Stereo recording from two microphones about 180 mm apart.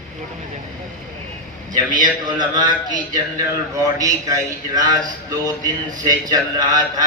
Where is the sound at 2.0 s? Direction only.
25° right (ahead or behind).